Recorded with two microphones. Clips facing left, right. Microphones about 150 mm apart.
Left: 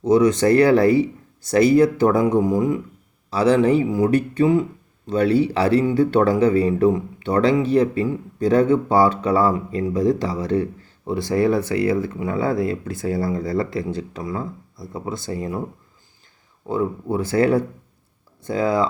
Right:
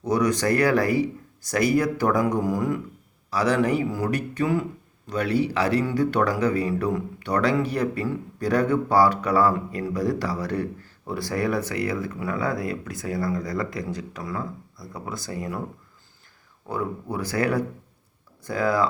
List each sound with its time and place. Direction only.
0.0 s speech: 25° left (ahead or behind)
16.6 s speech: 25° left (ahead or behind)